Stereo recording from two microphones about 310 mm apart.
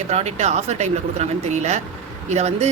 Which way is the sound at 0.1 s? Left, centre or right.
Right.